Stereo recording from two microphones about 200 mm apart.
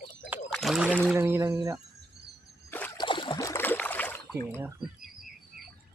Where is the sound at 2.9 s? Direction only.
25° left (ahead or behind); by 4.2 s 10° left (ahead or behind).